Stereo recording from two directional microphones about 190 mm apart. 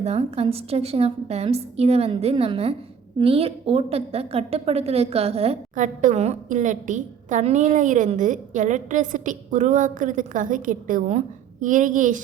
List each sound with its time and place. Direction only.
0.0 s a woman's voice: 35° right (ahead or behind)